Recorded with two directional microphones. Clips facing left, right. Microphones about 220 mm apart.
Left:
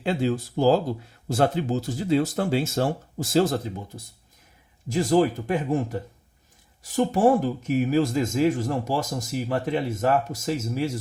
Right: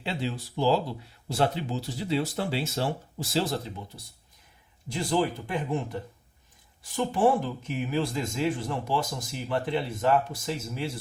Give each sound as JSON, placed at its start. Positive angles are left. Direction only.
{"t": 0.0, "sound": "speech", "side_deg": 45}